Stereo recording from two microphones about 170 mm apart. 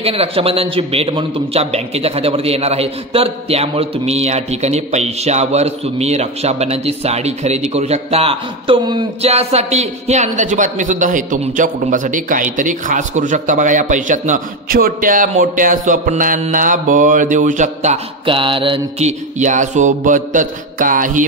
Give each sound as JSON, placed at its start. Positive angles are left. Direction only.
{"t": 0.0, "sound": "a man's voice", "side_deg": -35}
{"t": 18.2, "sound": "mantra", "side_deg": -30}